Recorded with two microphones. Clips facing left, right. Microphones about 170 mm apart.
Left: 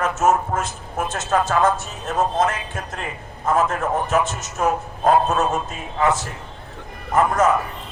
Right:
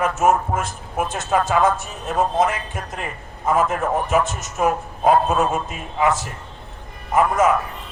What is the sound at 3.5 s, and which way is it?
Speech, centre (ahead or behind).